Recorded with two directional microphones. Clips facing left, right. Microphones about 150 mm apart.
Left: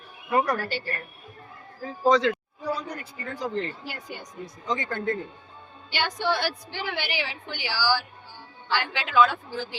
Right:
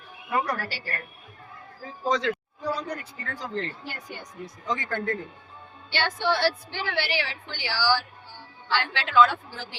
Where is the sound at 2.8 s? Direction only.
15° left (ahead or behind).